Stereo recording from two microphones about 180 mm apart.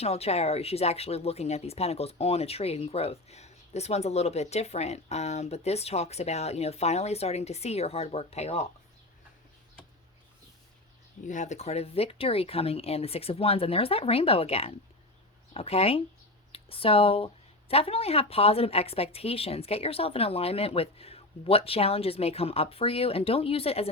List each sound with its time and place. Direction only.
0.0 s speech: 35° left (ahead or behind)
11.3 s speech: 40° left (ahead or behind)